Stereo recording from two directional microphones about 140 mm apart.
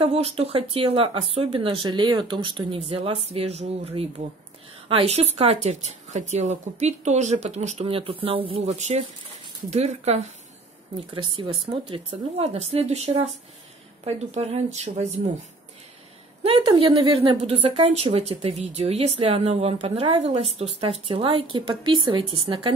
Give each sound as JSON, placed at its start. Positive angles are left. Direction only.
{"t": 0.0, "sound": "speech", "side_deg": -45}
{"t": 11.4, "sound": "speech", "side_deg": -35}
{"t": 16.4, "sound": "speech", "side_deg": -45}